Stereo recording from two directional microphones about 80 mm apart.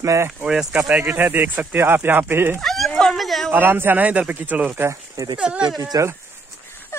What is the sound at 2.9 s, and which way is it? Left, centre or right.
Cat, centre.